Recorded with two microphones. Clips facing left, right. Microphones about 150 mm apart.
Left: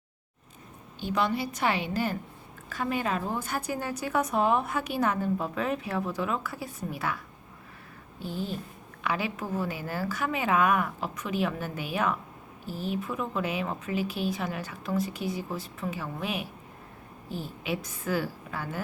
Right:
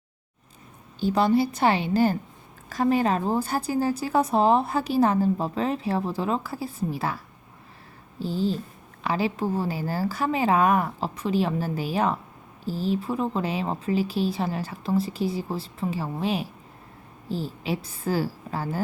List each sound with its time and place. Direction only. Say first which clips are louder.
0.9 s a woman's voice: right 7 dB; 35° right (ahead or behind)
8.2 s a woman's voice: right 7 dB; 30° right (ahead or behind)